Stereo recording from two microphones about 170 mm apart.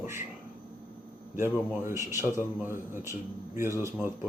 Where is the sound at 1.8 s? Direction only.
15° right (ahead or behind).